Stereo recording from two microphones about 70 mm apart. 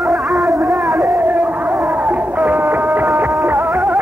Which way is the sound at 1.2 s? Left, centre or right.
Right.